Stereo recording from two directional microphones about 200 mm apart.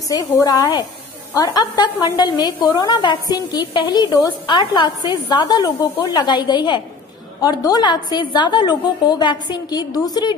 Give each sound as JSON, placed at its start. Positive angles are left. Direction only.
{"t": 0.1, "sound": "a woman's voice", "side_deg": 20}